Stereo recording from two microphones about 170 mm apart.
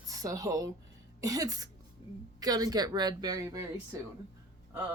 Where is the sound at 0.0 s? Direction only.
20° right (ahead or behind).